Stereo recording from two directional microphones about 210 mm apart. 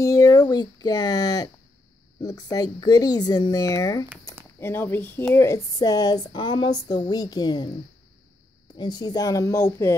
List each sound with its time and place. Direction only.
0.0 s a woman's voice: 15° left (ahead or behind)
8.7 s a woman's voice: 20° left (ahead or behind)